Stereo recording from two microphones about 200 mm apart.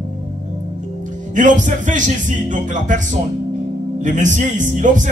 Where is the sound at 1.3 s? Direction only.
40° right (ahead or behind).